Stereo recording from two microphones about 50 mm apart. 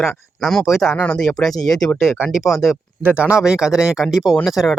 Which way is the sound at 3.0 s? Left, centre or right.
Right.